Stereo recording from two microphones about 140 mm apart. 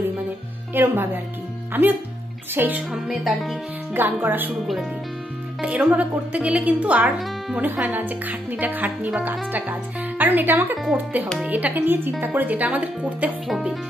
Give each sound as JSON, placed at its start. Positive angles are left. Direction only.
{"t": 0.7, "sound": "speech", "side_deg": -15}
{"t": 2.9, "sound": "speech", "side_deg": 0}
{"t": 3.9, "sound": "speech", "side_deg": -15}
{"t": 5.6, "sound": "speech", "side_deg": -10}
{"t": 7.6, "sound": "speech", "side_deg": -15}